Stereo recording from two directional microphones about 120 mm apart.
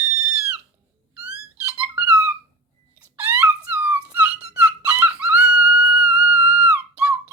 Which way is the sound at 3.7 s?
15° right (ahead or behind).